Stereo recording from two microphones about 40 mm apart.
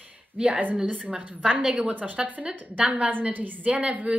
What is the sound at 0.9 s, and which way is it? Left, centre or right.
A woman's voice, right.